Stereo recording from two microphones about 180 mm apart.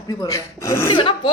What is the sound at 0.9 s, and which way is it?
Speech, 30° left (ahead or behind).